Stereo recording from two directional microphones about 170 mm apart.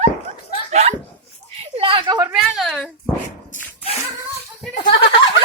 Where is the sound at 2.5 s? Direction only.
Centre (ahead or behind).